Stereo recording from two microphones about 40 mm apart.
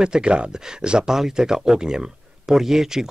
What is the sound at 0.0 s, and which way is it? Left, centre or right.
Speech, right.